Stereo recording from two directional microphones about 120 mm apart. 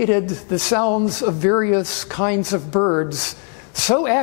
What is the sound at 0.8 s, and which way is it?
Speech, 25° left (ahead or behind).